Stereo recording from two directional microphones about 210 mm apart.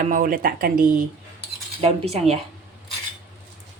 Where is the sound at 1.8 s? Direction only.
30° right (ahead or behind).